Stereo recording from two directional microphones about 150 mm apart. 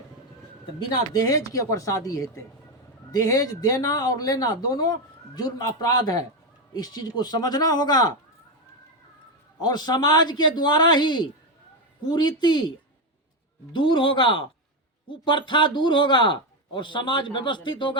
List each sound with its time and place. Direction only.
1.1 s speech: 25° left (ahead or behind)
9.6 s speech: 30° left (ahead or behind)
13.7 s speech: 35° left (ahead or behind)